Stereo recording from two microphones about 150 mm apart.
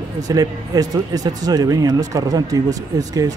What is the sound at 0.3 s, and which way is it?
Speech, 25° right (ahead or behind).